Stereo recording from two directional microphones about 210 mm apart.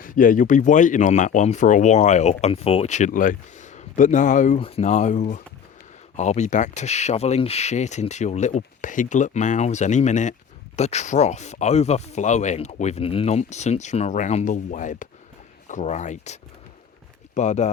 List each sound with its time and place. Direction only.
0.0 s speech: 40° left (ahead or behind)